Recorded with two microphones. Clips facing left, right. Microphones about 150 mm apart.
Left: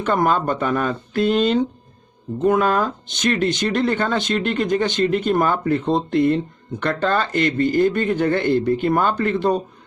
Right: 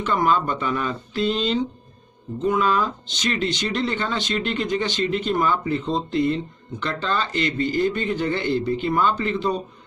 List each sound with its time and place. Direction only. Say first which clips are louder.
0.0 s speech: left 2 dB; 50° left (ahead or behind)